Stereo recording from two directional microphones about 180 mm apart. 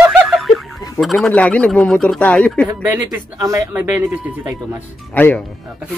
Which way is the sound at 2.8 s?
10° right (ahead or behind).